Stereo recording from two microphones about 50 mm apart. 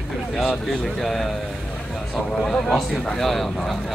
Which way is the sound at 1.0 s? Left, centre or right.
Centre.